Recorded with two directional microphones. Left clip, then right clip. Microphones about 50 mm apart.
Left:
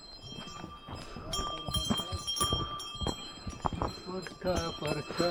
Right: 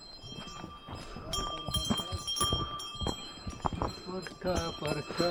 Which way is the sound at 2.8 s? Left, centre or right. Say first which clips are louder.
Even; right.